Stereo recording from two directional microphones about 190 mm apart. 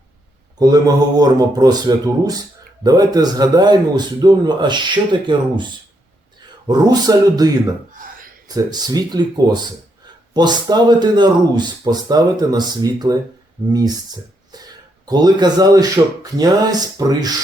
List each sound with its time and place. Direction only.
0.6 s speech: 20° right (ahead or behind)
7.9 s a sound: 45° right (ahead or behind)
8.4 s speech: 20° right (ahead or behind)